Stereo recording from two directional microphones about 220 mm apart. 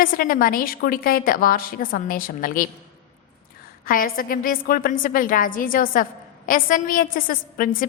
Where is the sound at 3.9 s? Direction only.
40° left (ahead or behind).